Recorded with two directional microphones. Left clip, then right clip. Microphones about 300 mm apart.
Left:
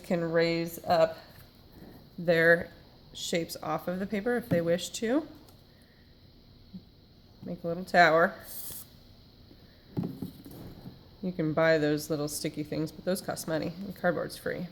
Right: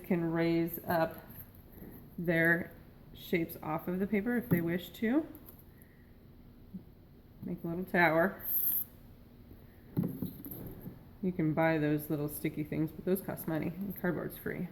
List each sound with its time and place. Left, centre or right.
0.1 s speech: left
2.2 s speech: left
7.4 s speech: left
11.3 s speech: left